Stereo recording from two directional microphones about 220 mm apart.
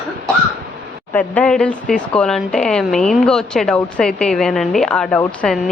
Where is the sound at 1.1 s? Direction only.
5° left (ahead or behind).